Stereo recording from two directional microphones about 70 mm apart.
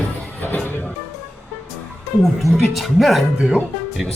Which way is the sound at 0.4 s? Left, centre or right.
Left.